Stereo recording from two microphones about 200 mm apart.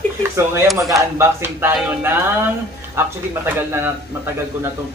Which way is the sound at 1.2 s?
10° right (ahead or behind).